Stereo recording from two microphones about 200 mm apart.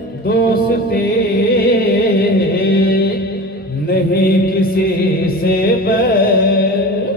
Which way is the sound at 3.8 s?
50° left (ahead or behind).